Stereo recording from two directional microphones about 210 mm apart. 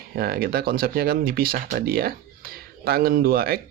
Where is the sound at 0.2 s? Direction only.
45° right (ahead or behind).